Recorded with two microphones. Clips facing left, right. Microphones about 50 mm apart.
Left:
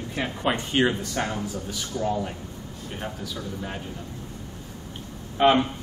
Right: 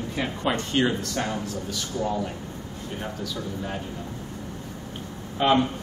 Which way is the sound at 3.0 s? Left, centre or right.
Centre.